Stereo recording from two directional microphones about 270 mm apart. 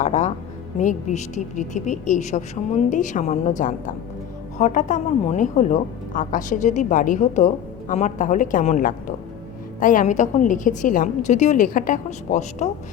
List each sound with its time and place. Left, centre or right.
0.0 s a woman's voice: left